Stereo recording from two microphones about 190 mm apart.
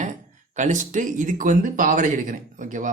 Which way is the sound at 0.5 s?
40° right (ahead or behind).